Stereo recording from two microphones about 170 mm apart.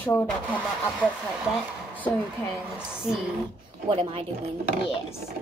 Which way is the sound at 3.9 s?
30° right (ahead or behind).